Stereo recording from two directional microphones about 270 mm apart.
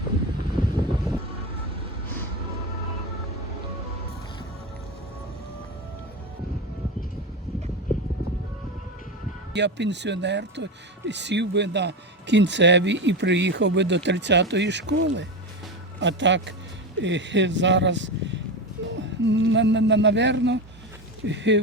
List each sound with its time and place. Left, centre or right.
0.6 s vehicle: centre
9.5 s speech: right